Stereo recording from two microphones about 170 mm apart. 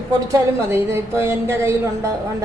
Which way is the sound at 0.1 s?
20° right (ahead or behind).